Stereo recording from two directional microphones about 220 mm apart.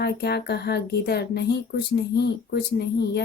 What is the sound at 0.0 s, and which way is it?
Speech, 45° left (ahead or behind).